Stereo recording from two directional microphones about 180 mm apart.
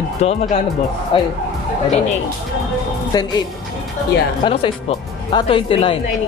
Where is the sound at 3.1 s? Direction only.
20° left (ahead or behind).